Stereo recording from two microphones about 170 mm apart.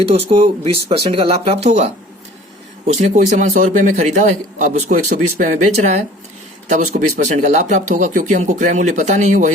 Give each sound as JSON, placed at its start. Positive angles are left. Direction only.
{"t": 0.3, "sound": "a man's voice", "side_deg": -35}